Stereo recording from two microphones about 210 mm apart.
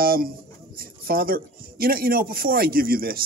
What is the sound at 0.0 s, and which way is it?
Speech, 45° right (ahead or behind).